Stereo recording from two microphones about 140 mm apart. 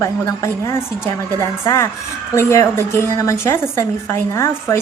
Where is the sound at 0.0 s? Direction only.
20° left (ahead or behind).